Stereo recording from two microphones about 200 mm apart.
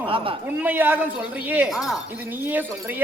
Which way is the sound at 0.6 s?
10° right (ahead or behind).